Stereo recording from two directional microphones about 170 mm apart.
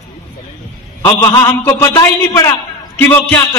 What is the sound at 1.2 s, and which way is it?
A man's voice, 20° left (ahead or behind).